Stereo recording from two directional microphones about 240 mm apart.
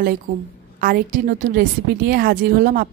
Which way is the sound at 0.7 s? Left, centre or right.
Right.